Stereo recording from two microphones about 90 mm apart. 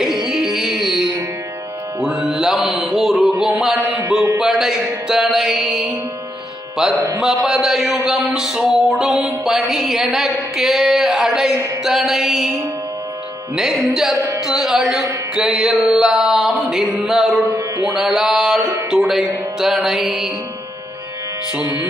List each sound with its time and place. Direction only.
0.0 s carnatic music: 5° right (ahead or behind)
2.0 s music: 5° right (ahead or behind)
3.8 s music: 20° right (ahead or behind)
4.4 s music: 5° right (ahead or behind)
14.4 s music: 5° right (ahead or behind)
21.5 s music: 15° right (ahead or behind)